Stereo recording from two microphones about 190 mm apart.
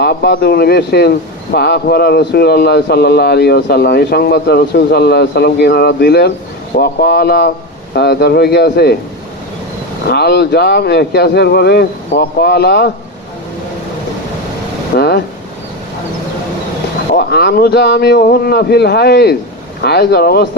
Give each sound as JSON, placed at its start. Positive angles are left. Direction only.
{"t": 0.0, "sound": "speech", "side_deg": 60}
{"t": 10.1, "sound": "speech", "side_deg": 60}
{"t": 14.9, "sound": "speech", "side_deg": 55}
{"t": 17.2, "sound": "speech", "side_deg": 60}